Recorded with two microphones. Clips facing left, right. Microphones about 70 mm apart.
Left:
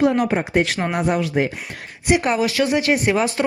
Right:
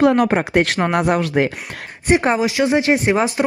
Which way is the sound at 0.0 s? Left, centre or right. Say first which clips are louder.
Right 3 dB; right.